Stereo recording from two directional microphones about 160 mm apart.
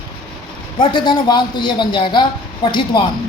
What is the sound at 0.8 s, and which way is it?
Speech, 30° left (ahead or behind).